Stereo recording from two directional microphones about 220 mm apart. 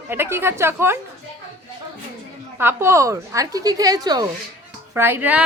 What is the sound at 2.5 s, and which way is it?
A woman's voice, 10° right (ahead or behind).